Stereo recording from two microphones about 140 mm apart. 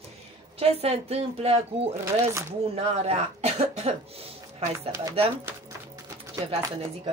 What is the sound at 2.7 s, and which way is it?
A woman's voice, 50° right (ahead or behind).